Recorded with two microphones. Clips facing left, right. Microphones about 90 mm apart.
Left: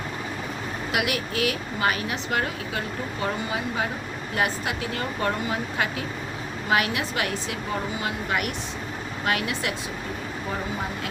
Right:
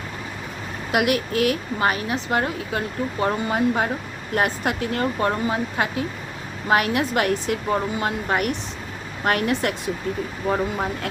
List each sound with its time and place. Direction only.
0.9 s a woman's voice: 45° right (ahead or behind)
5.2 s a woman's voice: 35° right (ahead or behind)